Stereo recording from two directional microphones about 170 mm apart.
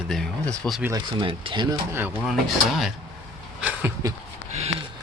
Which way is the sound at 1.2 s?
30° right (ahead or behind).